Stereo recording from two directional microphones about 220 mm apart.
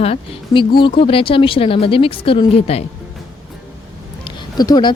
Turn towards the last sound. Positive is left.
turn(degrees=20)  # may be behind; listen again after turning